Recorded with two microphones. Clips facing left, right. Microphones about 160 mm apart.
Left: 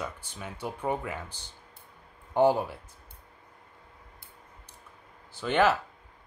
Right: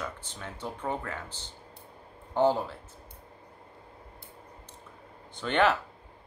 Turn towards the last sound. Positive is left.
turn(degrees=5)  # may be behind; listen again after turning